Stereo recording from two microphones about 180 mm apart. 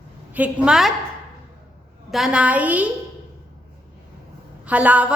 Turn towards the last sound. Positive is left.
turn(degrees=-10)  # may be behind; listen again after turning